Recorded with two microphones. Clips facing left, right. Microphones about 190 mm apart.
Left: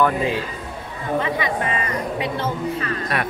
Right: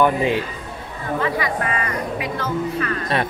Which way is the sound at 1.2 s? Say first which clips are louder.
Right 1 dB; 25° left (ahead or behind).